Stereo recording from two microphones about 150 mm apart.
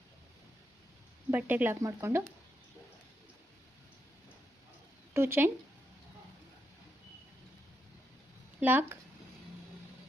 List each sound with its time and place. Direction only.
1.3 s speech: 10° right (ahead or behind)
5.1 s speech: 15° right (ahead or behind)
8.6 s speech: 10° right (ahead or behind)